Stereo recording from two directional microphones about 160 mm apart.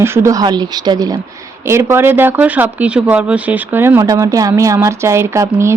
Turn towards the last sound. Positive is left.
turn(degrees=-15)  # may be behind; listen again after turning